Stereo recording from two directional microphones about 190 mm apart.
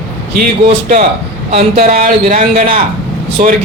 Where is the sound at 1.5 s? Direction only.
35° right (ahead or behind).